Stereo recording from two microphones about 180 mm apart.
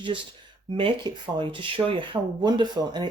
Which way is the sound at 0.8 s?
30° right (ahead or behind).